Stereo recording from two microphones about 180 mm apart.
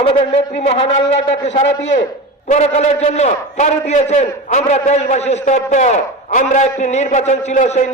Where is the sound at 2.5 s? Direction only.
40° left (ahead or behind).